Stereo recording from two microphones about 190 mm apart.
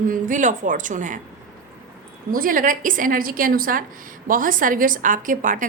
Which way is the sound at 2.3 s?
50° right (ahead or behind).